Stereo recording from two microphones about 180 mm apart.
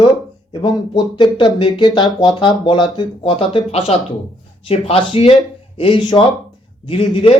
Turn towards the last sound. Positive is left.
turn(degrees=30)  # may be behind; listen again after turning